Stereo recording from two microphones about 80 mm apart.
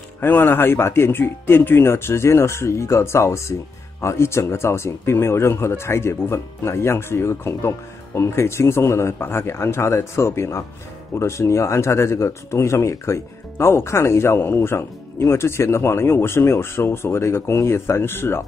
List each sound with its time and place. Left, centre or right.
0.2 s speech: left